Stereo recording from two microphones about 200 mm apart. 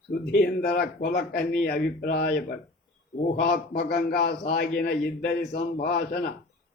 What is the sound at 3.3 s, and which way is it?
Speech, 55° left (ahead or behind).